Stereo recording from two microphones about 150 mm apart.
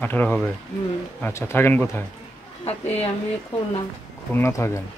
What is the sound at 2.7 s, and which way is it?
Speech, 45° left (ahead or behind).